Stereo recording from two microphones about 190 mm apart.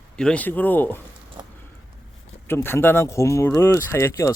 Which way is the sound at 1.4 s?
20° right (ahead or behind).